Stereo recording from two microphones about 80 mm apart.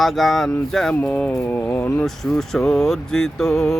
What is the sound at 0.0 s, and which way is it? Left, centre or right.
Speech, centre.